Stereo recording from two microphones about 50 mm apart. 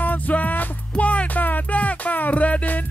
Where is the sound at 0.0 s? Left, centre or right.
Left.